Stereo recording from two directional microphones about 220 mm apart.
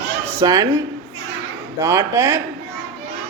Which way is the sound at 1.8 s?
10° right (ahead or behind).